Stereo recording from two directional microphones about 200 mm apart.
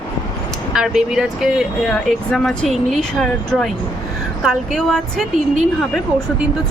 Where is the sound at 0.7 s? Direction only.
5° right (ahead or behind).